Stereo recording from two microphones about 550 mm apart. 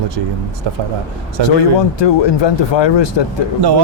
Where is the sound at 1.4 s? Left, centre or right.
Right.